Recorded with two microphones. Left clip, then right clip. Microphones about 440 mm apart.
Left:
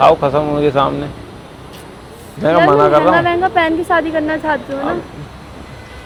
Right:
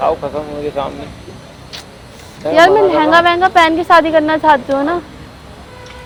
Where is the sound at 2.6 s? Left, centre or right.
Right.